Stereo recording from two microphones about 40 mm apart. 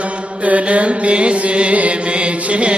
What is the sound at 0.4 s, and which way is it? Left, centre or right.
Chant, right.